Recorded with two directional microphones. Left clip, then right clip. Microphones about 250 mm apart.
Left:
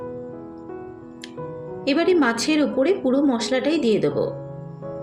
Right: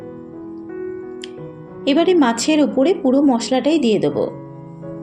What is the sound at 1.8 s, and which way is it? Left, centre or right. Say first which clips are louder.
Speech: right 4 dB; centre.